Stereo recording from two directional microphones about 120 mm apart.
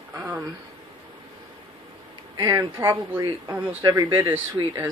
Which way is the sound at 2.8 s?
20° right (ahead or behind).